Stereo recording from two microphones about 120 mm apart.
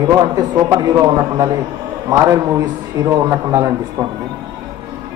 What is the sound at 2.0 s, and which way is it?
A man's voice, 30° right (ahead or behind).